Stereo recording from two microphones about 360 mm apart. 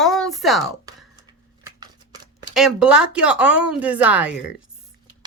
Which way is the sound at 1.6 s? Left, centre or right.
Centre.